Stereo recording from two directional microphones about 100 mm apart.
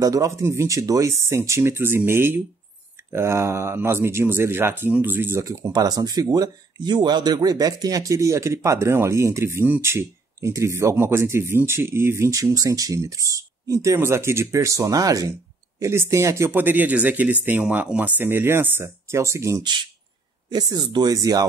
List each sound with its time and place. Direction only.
0.0 s speech: 35° right (ahead or behind)
5.4 s speech: 35° right (ahead or behind)
20.5 s speech: 45° right (ahead or behind)